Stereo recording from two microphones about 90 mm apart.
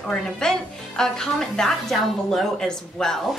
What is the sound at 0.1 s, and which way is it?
Speech, 5° left (ahead or behind).